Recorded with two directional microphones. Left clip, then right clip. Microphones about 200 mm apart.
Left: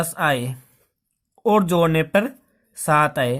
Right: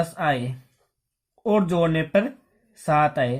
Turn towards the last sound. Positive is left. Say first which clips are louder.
# left 2 dB
turn(degrees=35)  # may be behind; listen again after turning